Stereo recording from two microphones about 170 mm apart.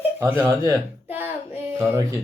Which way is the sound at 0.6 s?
10° right (ahead or behind).